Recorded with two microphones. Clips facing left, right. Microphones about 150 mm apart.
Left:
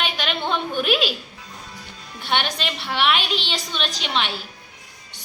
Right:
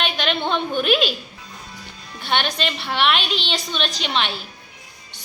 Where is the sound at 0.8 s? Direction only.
5° left (ahead or behind).